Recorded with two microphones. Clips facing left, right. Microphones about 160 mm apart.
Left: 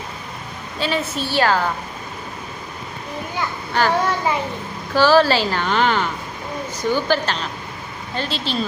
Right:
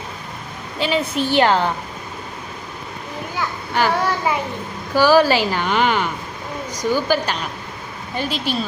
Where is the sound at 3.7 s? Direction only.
10° right (ahead or behind).